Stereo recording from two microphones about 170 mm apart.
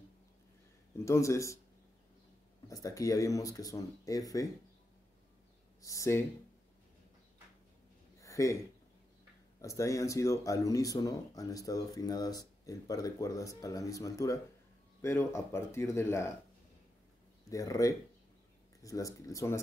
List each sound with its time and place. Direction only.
0.9 s speech: 15° left (ahead or behind)
2.7 s speech: 20° left (ahead or behind)
5.8 s speech: 20° left (ahead or behind)
8.2 s a sound: 20° left (ahead or behind)
9.6 s speech: 20° left (ahead or behind)
17.5 s speech: 20° left (ahead or behind)